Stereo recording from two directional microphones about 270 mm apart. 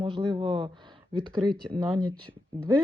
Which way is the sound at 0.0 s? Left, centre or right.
Centre.